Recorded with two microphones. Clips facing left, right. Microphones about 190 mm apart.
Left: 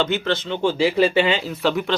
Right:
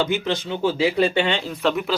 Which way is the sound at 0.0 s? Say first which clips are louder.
Left 1 dB; 15° right (ahead or behind).